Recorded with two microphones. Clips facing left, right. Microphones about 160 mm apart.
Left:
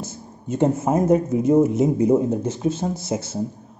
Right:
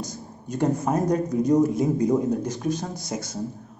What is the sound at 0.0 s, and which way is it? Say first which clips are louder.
A man's voice: left 1 dB; 25° left (ahead or behind).